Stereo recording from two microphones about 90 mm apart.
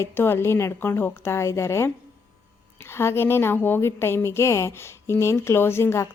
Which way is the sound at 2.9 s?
30° left (ahead or behind).